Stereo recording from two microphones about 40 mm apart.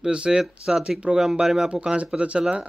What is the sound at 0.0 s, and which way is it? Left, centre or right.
Speech, right.